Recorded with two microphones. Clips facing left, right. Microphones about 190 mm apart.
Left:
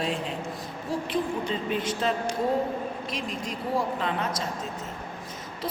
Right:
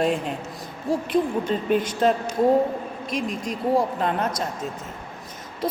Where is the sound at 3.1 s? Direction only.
45° right (ahead or behind).